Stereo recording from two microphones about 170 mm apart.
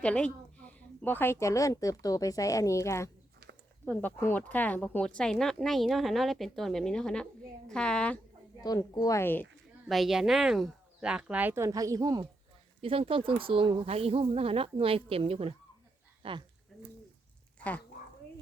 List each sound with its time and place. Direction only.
0.0 s speech: 5° left (ahead or behind)
8.6 s a woman's voice: 20° left (ahead or behind)
9.9 s speech: centre (ahead or behind); by 12.3 s 20° right (ahead or behind)
12.8 s speech: 35° right (ahead or behind)
17.6 s speech: 10° left (ahead or behind)